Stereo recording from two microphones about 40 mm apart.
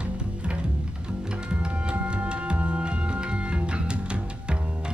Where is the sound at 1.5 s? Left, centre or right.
Right.